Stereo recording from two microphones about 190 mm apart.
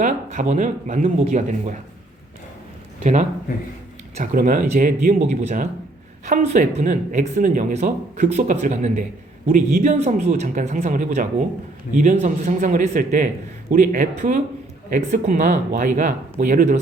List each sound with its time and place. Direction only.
0.0 s speech: 40° right (ahead or behind)
3.0 s speech: 40° right (ahead or behind)